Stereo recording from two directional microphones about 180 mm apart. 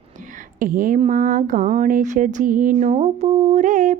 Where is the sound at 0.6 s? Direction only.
50° right (ahead or behind).